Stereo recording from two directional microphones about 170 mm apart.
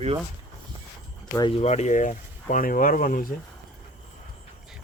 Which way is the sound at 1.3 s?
30° left (ahead or behind).